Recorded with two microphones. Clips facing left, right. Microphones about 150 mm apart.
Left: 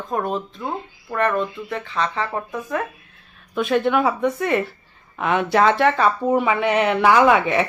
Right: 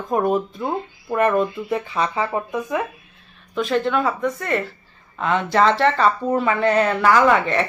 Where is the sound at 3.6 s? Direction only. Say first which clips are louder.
Left 1 dB; 10° left (ahead or behind).